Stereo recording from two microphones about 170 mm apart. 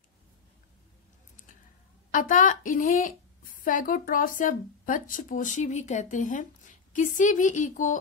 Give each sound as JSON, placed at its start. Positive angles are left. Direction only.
{"t": 2.0, "sound": "a woman's voice", "side_deg": 50}